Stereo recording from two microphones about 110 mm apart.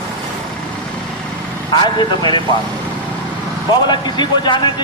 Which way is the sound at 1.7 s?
45° left (ahead or behind).